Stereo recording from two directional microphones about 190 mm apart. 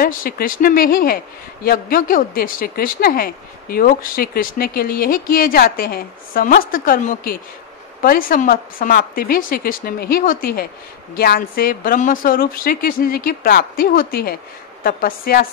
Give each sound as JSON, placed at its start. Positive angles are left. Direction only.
{"t": 0.0, "sound": "a woman's voice", "side_deg": 50}